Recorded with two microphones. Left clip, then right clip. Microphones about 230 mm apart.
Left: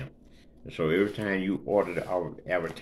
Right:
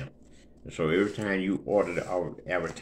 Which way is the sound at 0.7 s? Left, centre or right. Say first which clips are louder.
Even; centre.